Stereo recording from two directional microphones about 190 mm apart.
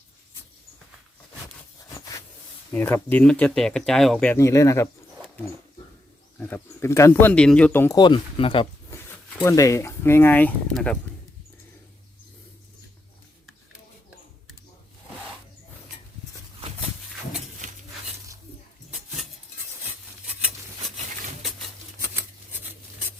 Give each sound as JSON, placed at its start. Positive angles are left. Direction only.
{"t": 2.7, "sound": "speech", "side_deg": 10}
{"t": 6.4, "sound": "speech", "side_deg": 10}
{"t": 7.9, "sound": "speech", "side_deg": 25}
{"t": 9.4, "sound": "speech", "side_deg": 15}